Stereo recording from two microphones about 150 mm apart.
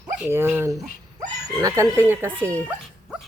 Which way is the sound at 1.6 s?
20° right (ahead or behind).